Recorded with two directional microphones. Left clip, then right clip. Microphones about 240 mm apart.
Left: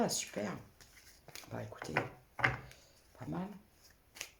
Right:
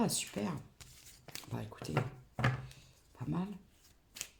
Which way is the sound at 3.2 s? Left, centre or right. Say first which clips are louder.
Right 2 dB; right.